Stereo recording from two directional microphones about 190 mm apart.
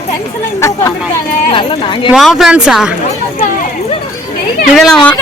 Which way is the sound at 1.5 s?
25° left (ahead or behind).